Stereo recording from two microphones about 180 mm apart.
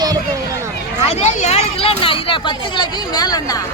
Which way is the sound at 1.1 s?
35° left (ahead or behind).